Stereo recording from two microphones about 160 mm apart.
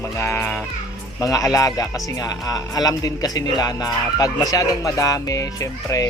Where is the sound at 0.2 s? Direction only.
15° left (ahead or behind).